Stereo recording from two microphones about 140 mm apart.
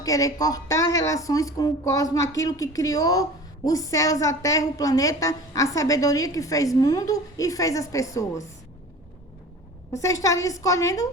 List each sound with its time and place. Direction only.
0.0 s a woman's voice: 25° left (ahead or behind)
9.9 s a woman's voice: 25° left (ahead or behind)